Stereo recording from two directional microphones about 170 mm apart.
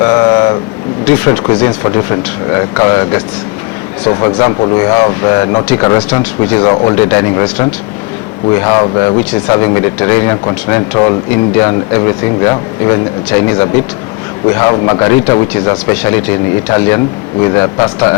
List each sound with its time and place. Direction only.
0.0 s vehicle: 20° left (ahead or behind)
1.2 s speech: 20° left (ahead or behind)